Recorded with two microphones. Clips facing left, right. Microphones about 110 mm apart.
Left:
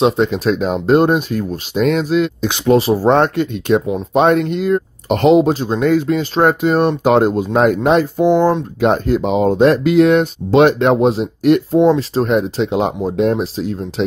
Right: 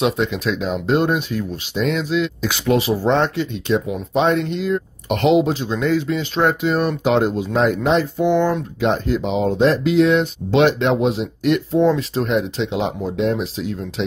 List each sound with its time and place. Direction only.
0.0 s speech: 35° left (ahead or behind)
2.4 s speech: 30° left (ahead or behind)
3.1 s speech: 50° left (ahead or behind)
5.1 s speech: 40° left (ahead or behind)
11.9 s speech: 35° left (ahead or behind)